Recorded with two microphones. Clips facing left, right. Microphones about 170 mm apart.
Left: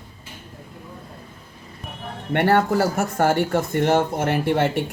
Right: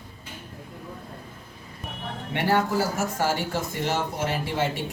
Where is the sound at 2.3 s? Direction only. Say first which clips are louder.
Left 5 dB; 60° left (ahead or behind).